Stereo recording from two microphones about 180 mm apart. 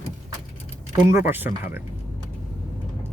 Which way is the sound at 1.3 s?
10° right (ahead or behind).